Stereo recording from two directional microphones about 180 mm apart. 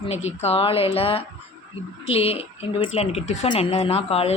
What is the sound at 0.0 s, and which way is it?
A woman's voice, 35° left (ahead or behind).